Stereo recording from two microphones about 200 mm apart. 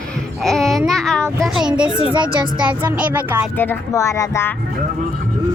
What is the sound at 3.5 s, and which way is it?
Speech, 10° left (ahead or behind).